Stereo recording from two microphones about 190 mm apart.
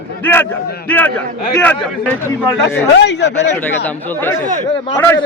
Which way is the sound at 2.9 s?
65° left (ahead or behind).